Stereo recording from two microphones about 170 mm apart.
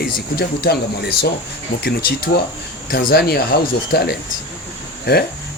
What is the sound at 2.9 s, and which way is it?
Speech, 60° left (ahead or behind).